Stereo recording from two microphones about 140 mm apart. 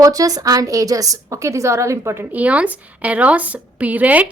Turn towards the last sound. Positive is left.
turn(degrees=-10)  # may be behind; listen again after turning